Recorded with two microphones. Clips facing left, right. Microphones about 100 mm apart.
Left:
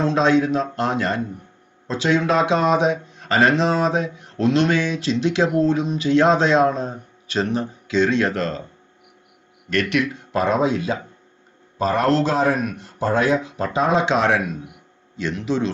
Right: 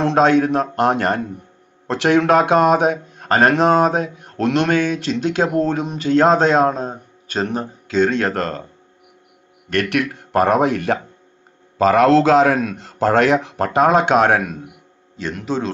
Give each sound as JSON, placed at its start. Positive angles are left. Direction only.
{"t": 0.0, "sound": "speech", "side_deg": -60}
{"t": 9.6, "sound": "speech", "side_deg": -55}
{"t": 11.8, "sound": "a man's voice", "side_deg": -90}